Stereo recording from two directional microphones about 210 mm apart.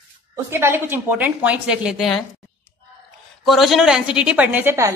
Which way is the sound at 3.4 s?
Centre (ahead or behind).